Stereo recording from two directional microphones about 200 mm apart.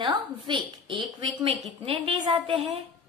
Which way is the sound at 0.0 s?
20° right (ahead or behind).